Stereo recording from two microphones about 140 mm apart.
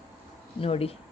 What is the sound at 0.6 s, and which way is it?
Speech, 45° left (ahead or behind).